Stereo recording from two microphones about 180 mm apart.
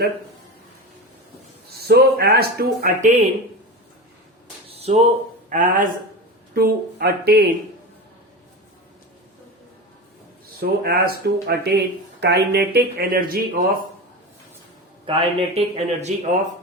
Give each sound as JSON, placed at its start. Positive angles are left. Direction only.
{"t": 1.9, "sound": "speech", "side_deg": -60}
{"t": 4.7, "sound": "a sound", "side_deg": -35}
{"t": 5.5, "sound": "a woman's voice", "side_deg": -45}
{"t": 6.5, "sound": "speech", "side_deg": -60}
{"t": 10.6, "sound": "speech", "side_deg": -55}
{"t": 15.0, "sound": "speech", "side_deg": -30}